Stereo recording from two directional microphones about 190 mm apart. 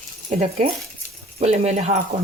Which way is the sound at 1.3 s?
35° right (ahead or behind).